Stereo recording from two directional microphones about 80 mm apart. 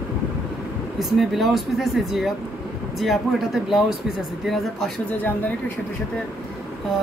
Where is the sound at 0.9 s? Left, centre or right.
Centre.